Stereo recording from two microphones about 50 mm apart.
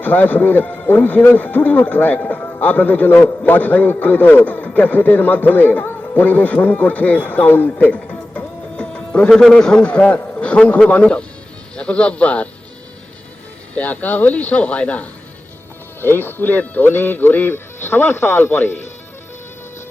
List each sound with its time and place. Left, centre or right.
0.0 s a man's voice: left
7.9 s music: left
9.5 s a man's voice: centre
9.8 s speech: left
13.7 s speech: left
16.0 s speech: left